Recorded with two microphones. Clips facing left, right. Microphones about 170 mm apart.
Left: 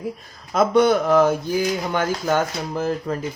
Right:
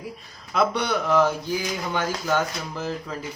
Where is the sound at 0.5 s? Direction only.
45° left (ahead or behind).